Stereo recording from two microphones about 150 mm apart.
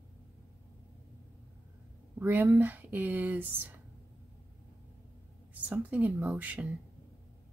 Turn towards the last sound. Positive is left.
turn(degrees=-10)  # may be behind; listen again after turning